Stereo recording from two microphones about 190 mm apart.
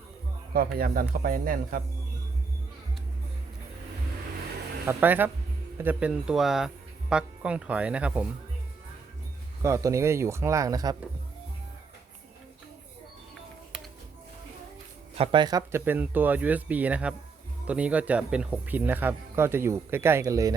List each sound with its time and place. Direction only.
0.5 s speech: 50° right (ahead or behind)
4.9 s speech: 10° right (ahead or behind)
9.6 s speech: 15° right (ahead or behind)
15.1 s speech: 30° right (ahead or behind)